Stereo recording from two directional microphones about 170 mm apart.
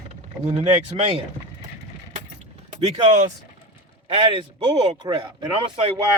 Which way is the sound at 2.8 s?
40° right (ahead or behind).